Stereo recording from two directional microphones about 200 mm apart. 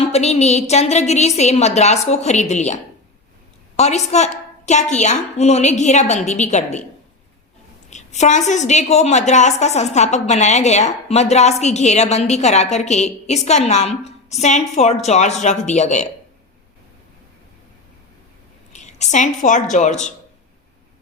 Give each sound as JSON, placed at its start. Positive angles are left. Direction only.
{"t": 0.0, "sound": "a woman's voice", "side_deg": 30}
{"t": 3.8, "sound": "a woman's voice", "side_deg": 35}
{"t": 7.9, "sound": "a woman's voice", "side_deg": 35}
{"t": 18.7, "sound": "a woman's voice", "side_deg": 35}